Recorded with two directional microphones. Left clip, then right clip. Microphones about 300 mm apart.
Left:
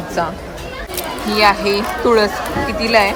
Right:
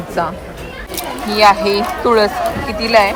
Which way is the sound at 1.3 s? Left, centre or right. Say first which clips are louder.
Right 3 dB; centre.